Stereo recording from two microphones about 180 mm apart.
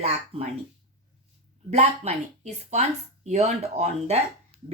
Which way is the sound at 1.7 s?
40° right (ahead or behind).